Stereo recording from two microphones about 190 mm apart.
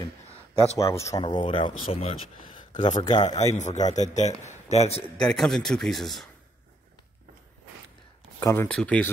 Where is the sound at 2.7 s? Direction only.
40° left (ahead or behind).